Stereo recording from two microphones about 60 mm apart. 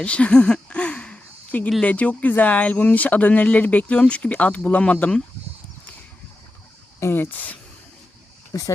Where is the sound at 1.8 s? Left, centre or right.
Left.